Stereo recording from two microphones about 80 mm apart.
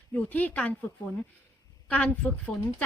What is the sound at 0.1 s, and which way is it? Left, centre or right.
Speech, left.